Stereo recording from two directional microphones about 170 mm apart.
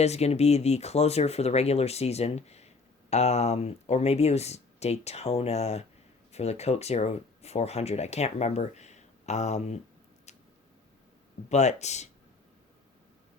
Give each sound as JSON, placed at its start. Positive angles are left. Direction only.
{"t": 0.0, "sound": "speech", "side_deg": 40}
{"t": 10.3, "sound": "a sound", "side_deg": 40}
{"t": 11.4, "sound": "speech", "side_deg": 40}